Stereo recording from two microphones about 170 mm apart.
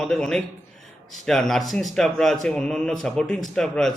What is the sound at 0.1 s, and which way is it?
Speech, 5° left (ahead or behind).